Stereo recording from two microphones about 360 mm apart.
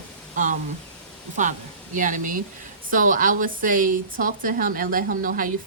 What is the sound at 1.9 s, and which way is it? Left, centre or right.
A woman's voice, right.